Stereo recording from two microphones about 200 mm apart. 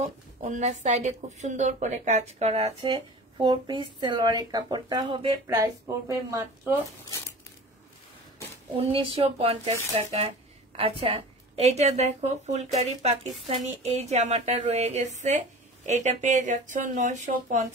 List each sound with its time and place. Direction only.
0.4 s speech: 35° right (ahead or behind)
2.9 s speech: 20° right (ahead or behind)
7.1 s crumpling: 15° left (ahead or behind)
8.7 s speech: 25° right (ahead or behind)